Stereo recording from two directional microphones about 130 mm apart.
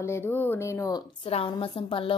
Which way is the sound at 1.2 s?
45° left (ahead or behind).